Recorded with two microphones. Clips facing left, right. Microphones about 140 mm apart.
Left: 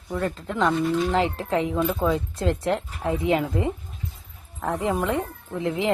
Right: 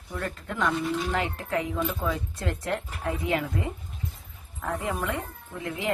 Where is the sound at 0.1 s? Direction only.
25° left (ahead or behind).